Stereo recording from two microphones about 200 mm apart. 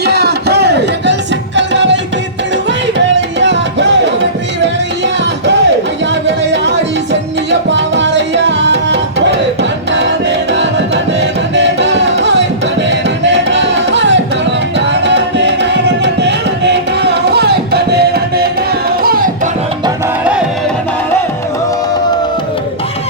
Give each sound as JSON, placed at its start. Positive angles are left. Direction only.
{"t": 0.0, "sound": "a sound", "side_deg": -55}
{"t": 1.5, "sound": "music", "side_deg": -65}
{"t": 3.2, "sound": "music", "side_deg": -65}
{"t": 6.2, "sound": "music", "side_deg": -60}
{"t": 7.7, "sound": "tabla", "side_deg": -65}
{"t": 9.9, "sound": "music", "side_deg": -65}